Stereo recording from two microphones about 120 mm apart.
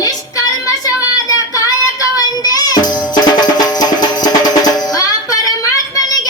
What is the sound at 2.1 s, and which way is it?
Music, 30° left (ahead or behind).